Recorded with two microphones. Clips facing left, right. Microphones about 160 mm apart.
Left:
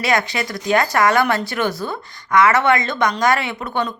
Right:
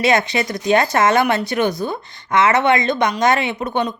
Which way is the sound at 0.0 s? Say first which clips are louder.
Right 3 dB; 20° right (ahead or behind).